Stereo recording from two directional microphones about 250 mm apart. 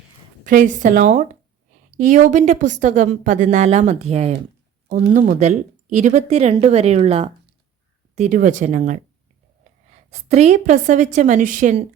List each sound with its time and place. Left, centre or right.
0.4 s speech: right
10.1 s speech: right